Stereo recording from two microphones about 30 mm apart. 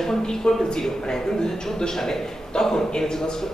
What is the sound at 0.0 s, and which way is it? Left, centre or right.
A man's voice, centre.